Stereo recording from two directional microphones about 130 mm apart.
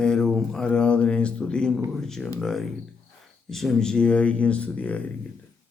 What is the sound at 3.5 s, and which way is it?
Speech, centre (ahead or behind).